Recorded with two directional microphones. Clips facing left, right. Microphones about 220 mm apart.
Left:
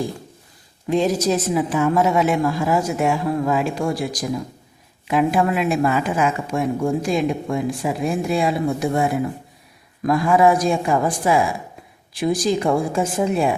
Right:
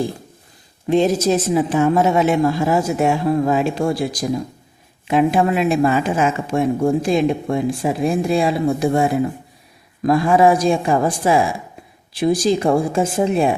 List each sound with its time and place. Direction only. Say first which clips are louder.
0.9 s speech: right 3 dB; 25° right (ahead or behind)
10.1 s speech: right 2 dB; 30° right (ahead or behind)